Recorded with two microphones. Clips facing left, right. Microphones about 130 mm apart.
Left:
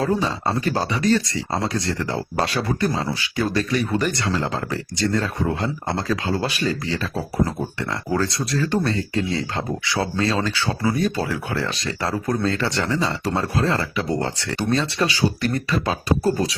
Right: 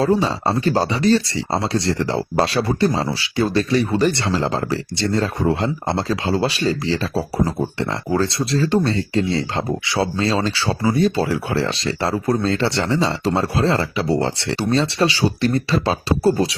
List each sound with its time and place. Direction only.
0.0 s speech: 35° right (ahead or behind)